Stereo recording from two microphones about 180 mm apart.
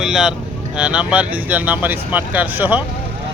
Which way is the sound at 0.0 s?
5° right (ahead or behind).